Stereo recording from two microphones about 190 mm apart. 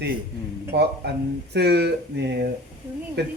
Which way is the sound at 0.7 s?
60° right (ahead or behind).